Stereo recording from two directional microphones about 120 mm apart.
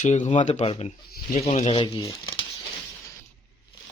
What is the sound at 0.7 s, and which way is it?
Speech, 60° left (ahead or behind).